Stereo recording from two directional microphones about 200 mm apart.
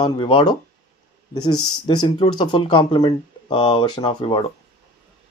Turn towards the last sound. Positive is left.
turn(degrees=25)  # may be behind; listen again after turning